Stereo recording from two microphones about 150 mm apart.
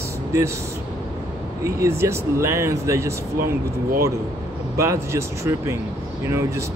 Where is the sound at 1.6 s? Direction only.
20° right (ahead or behind).